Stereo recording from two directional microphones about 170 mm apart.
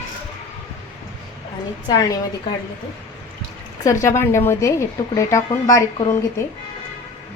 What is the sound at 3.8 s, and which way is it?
A woman's voice, 20° left (ahead or behind).